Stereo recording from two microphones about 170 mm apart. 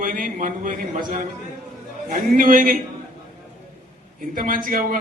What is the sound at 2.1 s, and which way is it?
Speech, 55° right (ahead or behind).